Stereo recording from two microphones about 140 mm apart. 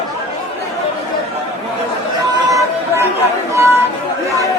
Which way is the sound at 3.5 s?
20° right (ahead or behind).